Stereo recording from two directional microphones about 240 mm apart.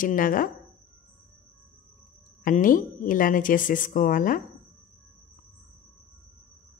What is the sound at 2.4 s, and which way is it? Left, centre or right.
A woman's voice, left.